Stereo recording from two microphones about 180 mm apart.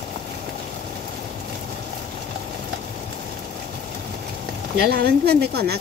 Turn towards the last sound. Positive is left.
turn(degrees=-65)  # may be behind; listen again after turning